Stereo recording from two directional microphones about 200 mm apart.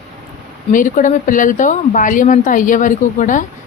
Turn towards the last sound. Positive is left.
turn(degrees=40)  # may be behind; listen again after turning